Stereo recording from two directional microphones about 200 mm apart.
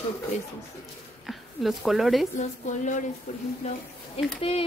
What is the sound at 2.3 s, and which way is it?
A woman's voice, 40° left (ahead or behind).